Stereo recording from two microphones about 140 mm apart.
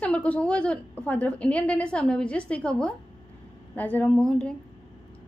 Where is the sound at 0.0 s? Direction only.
10° left (ahead or behind).